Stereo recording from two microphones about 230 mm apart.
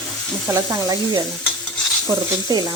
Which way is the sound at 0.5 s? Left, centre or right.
Centre.